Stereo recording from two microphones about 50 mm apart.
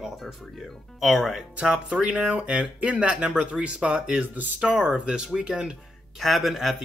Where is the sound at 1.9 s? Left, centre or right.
Right.